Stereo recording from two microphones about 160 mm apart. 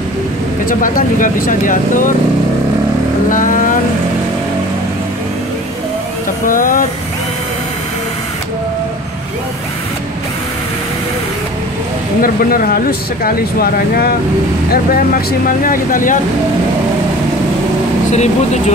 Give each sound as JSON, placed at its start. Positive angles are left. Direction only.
{"t": 0.7, "sound": "speech", "side_deg": 60}
{"t": 3.3, "sound": "speech", "side_deg": 55}
{"t": 6.4, "sound": "speech", "side_deg": 60}
{"t": 12.2, "sound": "speech", "side_deg": 65}
{"t": 18.1, "sound": "speech", "side_deg": 45}